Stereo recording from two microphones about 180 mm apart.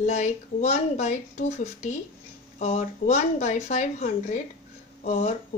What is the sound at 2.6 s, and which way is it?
Speech, 35° left (ahead or behind).